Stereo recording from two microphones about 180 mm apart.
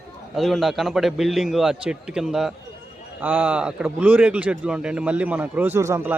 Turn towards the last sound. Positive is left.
turn(degrees=-15)  # may be behind; listen again after turning